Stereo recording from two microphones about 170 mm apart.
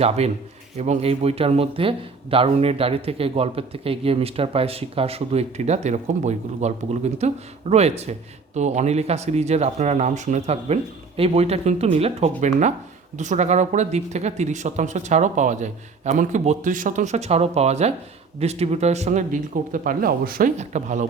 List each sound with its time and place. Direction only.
0.2 s speech: 40° right (ahead or behind); by 20.5 s 60° right (ahead or behind)
20.6 s speech: 45° right (ahead or behind)